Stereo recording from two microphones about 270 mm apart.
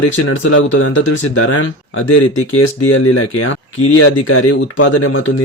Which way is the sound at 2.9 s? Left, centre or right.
Left.